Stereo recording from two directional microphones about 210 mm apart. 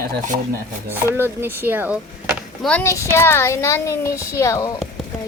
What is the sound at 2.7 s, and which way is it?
A woman's voice, 15° left (ahead or behind).